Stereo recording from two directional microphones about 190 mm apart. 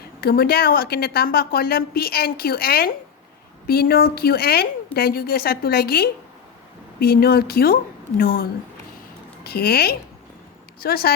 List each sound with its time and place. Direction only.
0.0 s a woman's voice: 55° left (ahead or behind)